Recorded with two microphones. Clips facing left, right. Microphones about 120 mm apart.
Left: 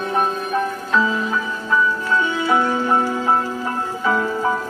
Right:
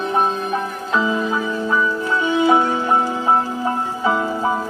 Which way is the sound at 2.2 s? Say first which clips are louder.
Right 6 dB; 15° right (ahead or behind).